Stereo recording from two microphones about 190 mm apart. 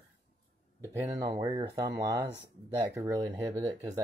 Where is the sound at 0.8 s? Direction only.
20° right (ahead or behind).